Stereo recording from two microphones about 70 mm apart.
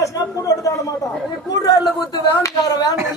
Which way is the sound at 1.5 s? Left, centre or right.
Left.